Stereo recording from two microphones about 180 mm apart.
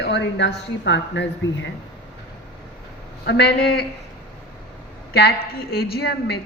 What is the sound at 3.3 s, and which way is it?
Speech, 65° left (ahead or behind).